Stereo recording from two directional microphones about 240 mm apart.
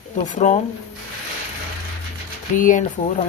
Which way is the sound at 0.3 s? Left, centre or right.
Left.